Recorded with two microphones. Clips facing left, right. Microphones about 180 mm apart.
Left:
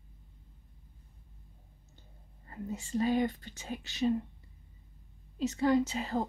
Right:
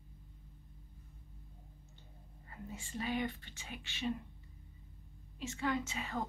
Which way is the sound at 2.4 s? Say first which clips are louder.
Left 9 dB; 40° left (ahead or behind).